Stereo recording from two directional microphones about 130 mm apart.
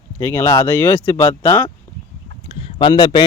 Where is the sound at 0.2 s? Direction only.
15° left (ahead or behind).